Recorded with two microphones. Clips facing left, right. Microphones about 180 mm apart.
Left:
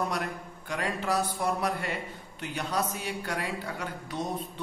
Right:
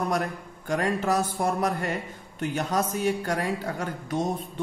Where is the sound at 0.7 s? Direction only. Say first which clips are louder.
Right 6 dB; 45° right (ahead or behind).